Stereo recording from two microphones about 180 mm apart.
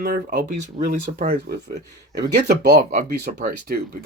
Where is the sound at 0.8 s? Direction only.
40° right (ahead or behind).